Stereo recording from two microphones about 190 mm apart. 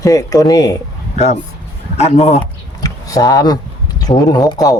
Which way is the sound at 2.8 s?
20° left (ahead or behind).